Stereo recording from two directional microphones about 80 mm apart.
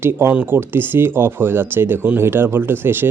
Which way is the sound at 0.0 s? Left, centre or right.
Right.